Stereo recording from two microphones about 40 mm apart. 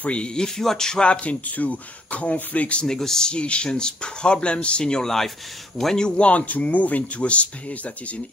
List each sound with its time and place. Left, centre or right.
0.0 s speech: left
0.6 s speech: centre
1.0 s speech: left
2.8 s speech: centre
3.3 s speech: left
5.0 s speech: centre
5.9 s speech: left